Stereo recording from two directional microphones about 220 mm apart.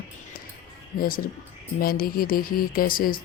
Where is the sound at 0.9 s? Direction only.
40° left (ahead or behind).